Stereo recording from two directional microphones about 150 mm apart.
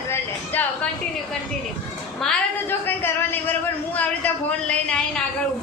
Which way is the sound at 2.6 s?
15° left (ahead or behind).